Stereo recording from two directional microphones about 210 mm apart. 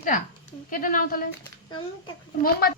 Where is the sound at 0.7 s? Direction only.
40° left (ahead or behind).